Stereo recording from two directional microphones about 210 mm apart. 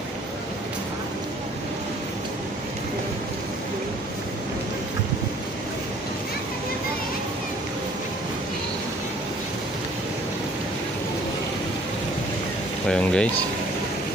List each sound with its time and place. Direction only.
12.8 s speech: 5° left (ahead or behind)